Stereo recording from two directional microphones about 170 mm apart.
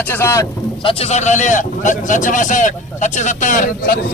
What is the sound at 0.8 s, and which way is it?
A man's voice, 35° left (ahead or behind).